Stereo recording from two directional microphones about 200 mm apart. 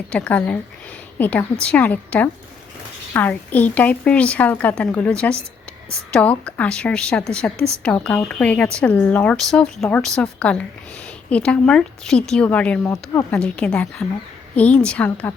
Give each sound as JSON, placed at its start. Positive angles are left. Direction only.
{"t": 0.1, "sound": "a woman's voice", "side_deg": 5}